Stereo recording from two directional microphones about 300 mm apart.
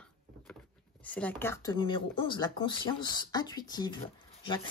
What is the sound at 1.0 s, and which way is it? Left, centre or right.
Speech, centre.